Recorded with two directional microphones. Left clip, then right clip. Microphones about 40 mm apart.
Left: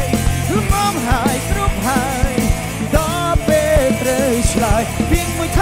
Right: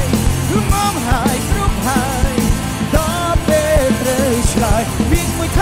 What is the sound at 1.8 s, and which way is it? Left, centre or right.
Music, right.